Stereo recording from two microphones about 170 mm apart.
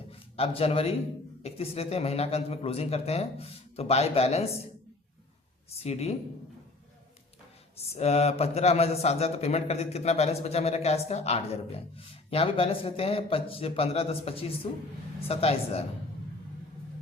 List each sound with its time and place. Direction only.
0.1 s a man's voice: 35° left (ahead or behind)
5.8 s a man's voice: 35° left (ahead or behind)
7.9 s a man's voice: 40° left (ahead or behind)